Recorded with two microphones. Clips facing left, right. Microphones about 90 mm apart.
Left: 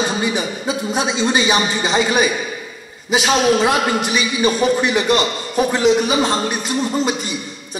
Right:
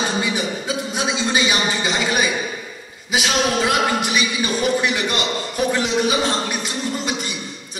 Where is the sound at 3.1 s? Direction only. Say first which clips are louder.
Left 5 dB; 35° left (ahead or behind).